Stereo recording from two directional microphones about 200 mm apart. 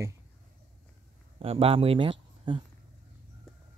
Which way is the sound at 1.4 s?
30° right (ahead or behind).